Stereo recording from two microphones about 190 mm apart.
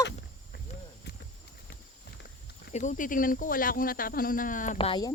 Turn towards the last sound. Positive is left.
turn(degrees=25)  # may be behind; listen again after turning